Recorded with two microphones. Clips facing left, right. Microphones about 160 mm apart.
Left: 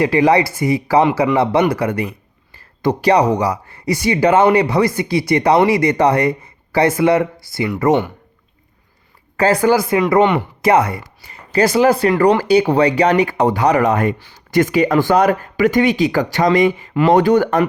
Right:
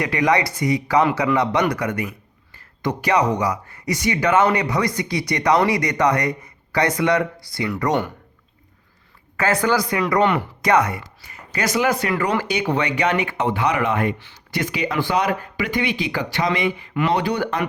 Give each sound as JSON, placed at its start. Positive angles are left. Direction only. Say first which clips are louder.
{"t": 0.0, "sound": "speech", "louder": "left 6 dB", "side_deg": 30}
{"t": 9.4, "sound": "speech", "louder": "left 6 dB", "side_deg": 35}